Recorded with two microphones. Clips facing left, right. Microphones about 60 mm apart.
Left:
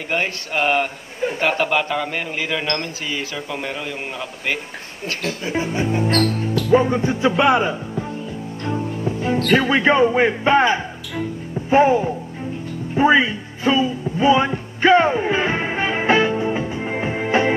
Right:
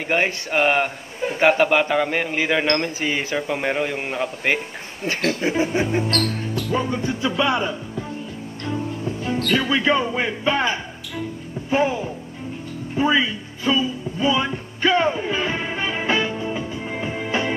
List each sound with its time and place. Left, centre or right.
0.1 s a man's voice: centre
6.7 s speech: left
8.6 s music: left
9.5 s speech: left
12.9 s music: left